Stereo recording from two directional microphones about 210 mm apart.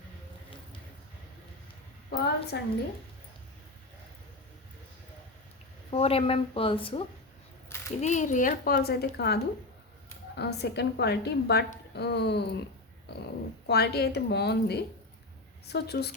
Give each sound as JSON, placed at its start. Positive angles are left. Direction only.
{"t": 2.0, "sound": "a woman's voice", "side_deg": 50}
{"t": 5.9, "sound": "a woman's voice", "side_deg": 30}
{"t": 8.0, "sound": "a woman's voice", "side_deg": 35}
{"t": 13.7, "sound": "a woman's voice", "side_deg": 50}